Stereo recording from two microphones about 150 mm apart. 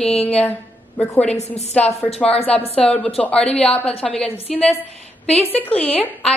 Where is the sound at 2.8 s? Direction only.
10° left (ahead or behind).